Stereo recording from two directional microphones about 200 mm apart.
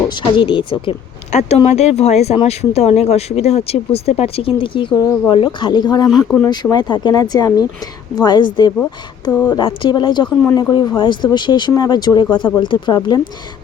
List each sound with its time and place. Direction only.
0.1 s speech: 25° left (ahead or behind)